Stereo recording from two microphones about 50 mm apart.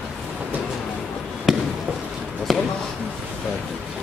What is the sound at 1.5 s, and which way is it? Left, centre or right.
Fireworks, centre.